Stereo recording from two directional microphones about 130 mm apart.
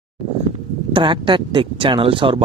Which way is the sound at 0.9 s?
40° right (ahead or behind).